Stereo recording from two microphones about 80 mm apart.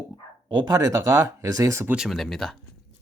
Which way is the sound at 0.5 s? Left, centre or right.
Right.